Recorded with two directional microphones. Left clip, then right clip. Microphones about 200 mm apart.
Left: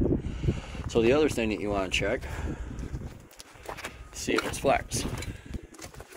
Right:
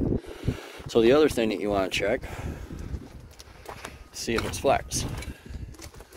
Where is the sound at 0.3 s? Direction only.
50° right (ahead or behind).